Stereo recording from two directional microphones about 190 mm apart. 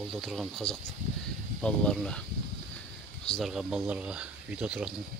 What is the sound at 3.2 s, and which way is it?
Speech, centre (ahead or behind).